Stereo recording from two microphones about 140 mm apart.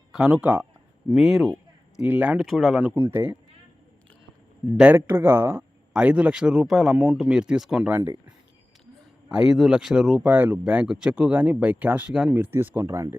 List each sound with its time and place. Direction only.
0.1 s speech: 5° right (ahead or behind)
2.5 s speech: centre (ahead or behind)
2.8 s speech: 15° right (ahead or behind)
4.8 s speech: 10° right (ahead or behind)
7.9 s speech: 20° right (ahead or behind)
9.3 s speech: 5° right (ahead or behind)